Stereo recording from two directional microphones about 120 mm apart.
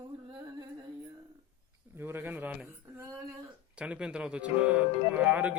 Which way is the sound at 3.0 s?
20° right (ahead or behind).